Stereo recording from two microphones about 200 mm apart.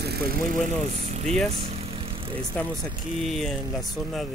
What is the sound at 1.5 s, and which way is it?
Vehicle, 30° right (ahead or behind).